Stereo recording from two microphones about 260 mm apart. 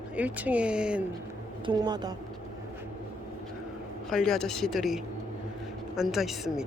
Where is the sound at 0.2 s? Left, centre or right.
Centre.